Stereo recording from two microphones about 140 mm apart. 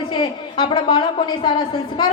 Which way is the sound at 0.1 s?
35° left (ahead or behind).